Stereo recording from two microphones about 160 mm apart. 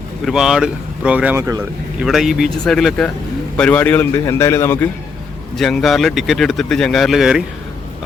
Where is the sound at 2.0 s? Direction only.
Centre (ahead or behind); by 4.8 s 15° left (ahead or behind).